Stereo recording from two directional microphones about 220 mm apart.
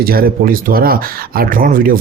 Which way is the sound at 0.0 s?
45° right (ahead or behind).